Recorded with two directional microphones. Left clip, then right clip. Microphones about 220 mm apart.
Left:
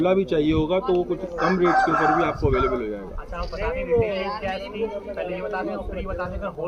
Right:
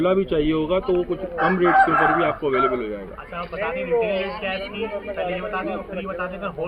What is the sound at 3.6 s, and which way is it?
Speech, 40° left (ahead or behind).